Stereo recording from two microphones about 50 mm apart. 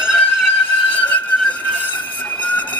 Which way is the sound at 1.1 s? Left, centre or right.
Left.